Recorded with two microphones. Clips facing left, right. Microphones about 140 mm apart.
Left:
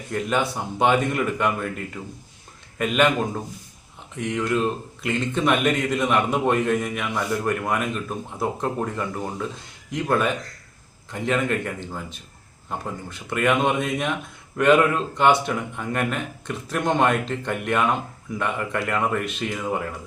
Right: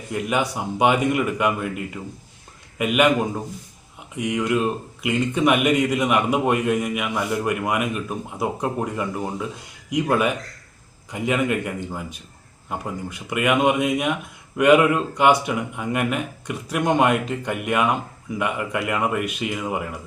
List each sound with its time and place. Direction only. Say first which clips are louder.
0.1 s speech: right 1 dB; 10° right (ahead or behind)